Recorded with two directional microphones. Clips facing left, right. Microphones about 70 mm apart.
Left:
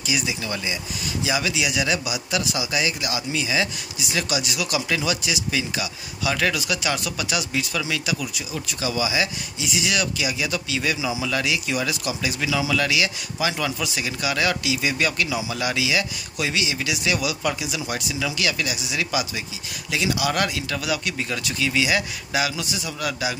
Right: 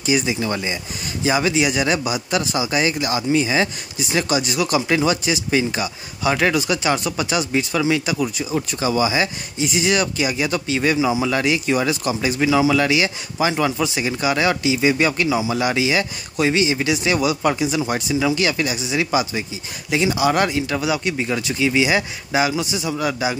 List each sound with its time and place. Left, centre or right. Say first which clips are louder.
0.0 s a man's voice: right 7 dB; right